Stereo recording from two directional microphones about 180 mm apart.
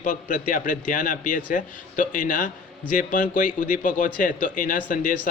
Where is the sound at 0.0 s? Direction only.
45° left (ahead or behind).